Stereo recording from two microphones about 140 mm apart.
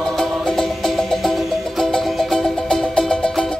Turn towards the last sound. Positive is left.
turn(degrees=5)  # may be behind; listen again after turning